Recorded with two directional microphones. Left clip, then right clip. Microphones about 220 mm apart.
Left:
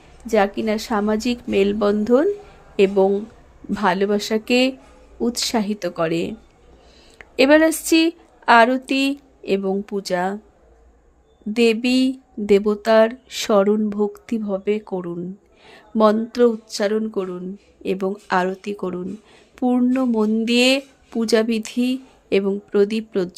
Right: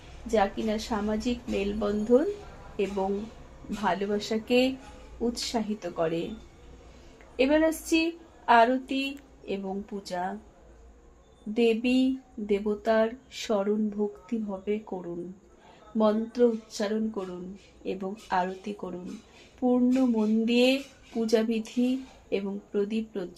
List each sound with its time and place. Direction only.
0.3 s a woman's voice: 50° left (ahead or behind)
7.3 s a woman's voice: 50° left (ahead or behind)
11.5 s a woman's voice: 55° left (ahead or behind)
19.5 s a sound: 55° left (ahead or behind)
21.2 s a woman's voice: 55° left (ahead or behind)